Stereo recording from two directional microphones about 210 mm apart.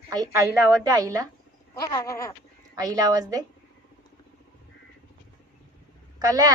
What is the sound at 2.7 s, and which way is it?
Speech, 20° right (ahead or behind).